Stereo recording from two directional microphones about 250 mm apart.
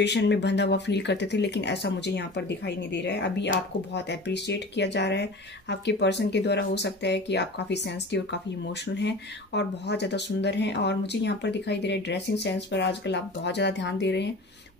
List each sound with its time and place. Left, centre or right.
0.0 s speech: left